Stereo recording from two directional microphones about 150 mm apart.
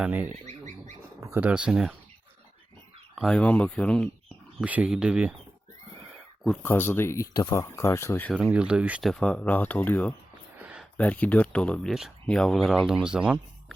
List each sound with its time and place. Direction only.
0.0 s speech: 10° right (ahead or behind)
0.4 s bird: 55° right (ahead or behind)
1.2 s speech: 15° right (ahead or behind)
3.2 s speech: 5° left (ahead or behind)
4.6 s speech: 10° right (ahead or behind)
6.6 s speech: 15° left (ahead or behind)
8.3 s speech: 5° right (ahead or behind); by 10.2 s 10° left (ahead or behind)
10.6 s a sound: 10° right (ahead or behind)
10.9 s speech: 10° left (ahead or behind); by 13.7 s 5° right (ahead or behind)